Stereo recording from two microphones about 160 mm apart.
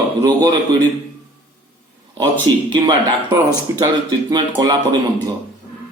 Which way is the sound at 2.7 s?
30° right (ahead or behind).